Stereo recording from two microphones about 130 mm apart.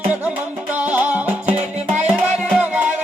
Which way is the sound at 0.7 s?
10° right (ahead or behind).